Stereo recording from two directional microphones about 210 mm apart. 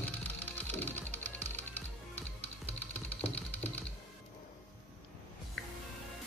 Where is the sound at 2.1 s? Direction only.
5° left (ahead or behind).